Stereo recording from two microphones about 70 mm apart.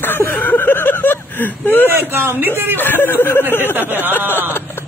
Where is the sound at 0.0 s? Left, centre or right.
Left.